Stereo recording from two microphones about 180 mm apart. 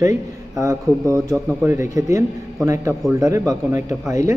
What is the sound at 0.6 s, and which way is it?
A man's voice, 20° right (ahead or behind).